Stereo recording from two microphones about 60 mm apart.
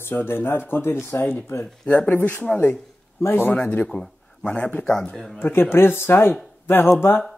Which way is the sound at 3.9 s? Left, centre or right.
Centre.